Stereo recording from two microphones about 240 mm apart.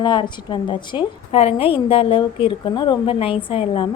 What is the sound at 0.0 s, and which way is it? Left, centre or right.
A woman's voice, centre.